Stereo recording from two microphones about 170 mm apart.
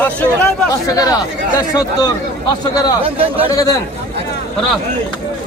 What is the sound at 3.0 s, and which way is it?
Speech, 35° right (ahead or behind).